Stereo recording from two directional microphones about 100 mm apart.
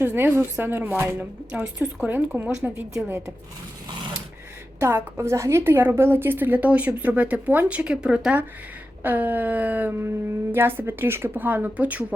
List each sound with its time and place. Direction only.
0.0 s a woman's voice: 20° right (ahead or behind)
1.5 s a sound: 15° right (ahead or behind)
2.6 s a woman's voice: 20° right (ahead or behind)
4.8 s a woman's voice: 25° right (ahead or behind)
9.0 s a sound: 20° right (ahead or behind)
10.5 s a woman's voice: 20° right (ahead or behind)